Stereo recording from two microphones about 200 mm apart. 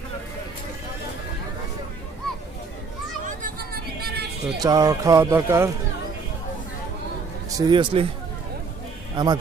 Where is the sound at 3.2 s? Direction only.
45° right (ahead or behind).